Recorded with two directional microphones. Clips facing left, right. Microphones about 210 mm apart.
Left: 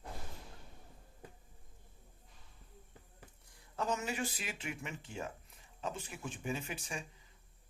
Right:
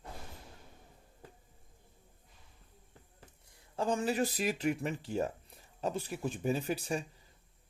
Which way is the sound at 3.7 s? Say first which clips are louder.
Right 6 dB; 30° right (ahead or behind).